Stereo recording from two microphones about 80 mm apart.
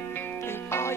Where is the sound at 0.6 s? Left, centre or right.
Left.